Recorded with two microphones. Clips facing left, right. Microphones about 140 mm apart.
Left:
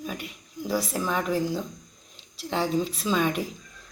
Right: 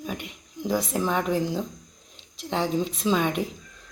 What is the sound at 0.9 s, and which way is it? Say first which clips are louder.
Speech: right 2 dB; 20° right (ahead or behind).